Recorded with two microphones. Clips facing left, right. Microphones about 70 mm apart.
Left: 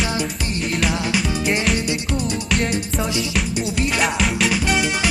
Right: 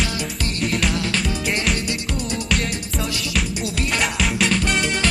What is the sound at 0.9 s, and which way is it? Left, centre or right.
Music, centre.